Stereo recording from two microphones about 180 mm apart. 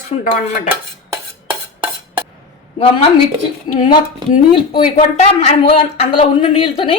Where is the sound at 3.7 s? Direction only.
25° left (ahead or behind).